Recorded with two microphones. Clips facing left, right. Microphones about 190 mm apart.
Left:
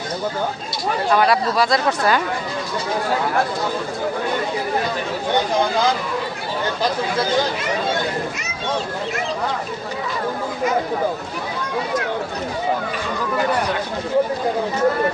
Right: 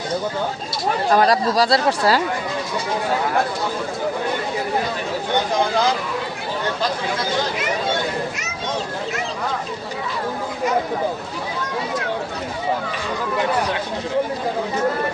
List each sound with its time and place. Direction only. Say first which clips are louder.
1.1 s speech: right 1 dB; 40° right (ahead or behind)